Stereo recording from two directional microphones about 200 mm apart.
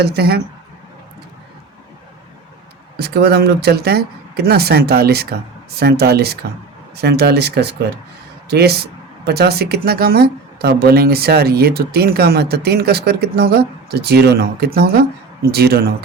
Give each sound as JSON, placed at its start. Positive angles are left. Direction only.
{"t": 0.0, "sound": "speech", "side_deg": -55}
{"t": 3.0, "sound": "speech", "side_deg": -55}